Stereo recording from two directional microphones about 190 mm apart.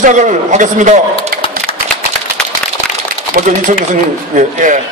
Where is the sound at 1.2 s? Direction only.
30° left (ahead or behind).